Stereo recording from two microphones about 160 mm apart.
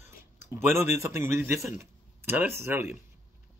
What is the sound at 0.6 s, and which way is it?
Speech, 15° right (ahead or behind).